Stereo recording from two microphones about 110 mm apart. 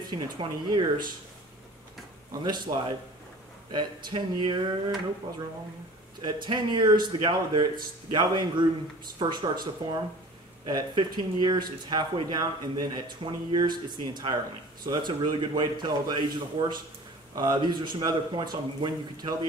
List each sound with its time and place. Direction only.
0.0 s speech: 40° right (ahead or behind)
2.4 s speech: 40° right (ahead or behind)
6.2 s speech: 40° right (ahead or behind)
10.6 s speech: 40° right (ahead or behind)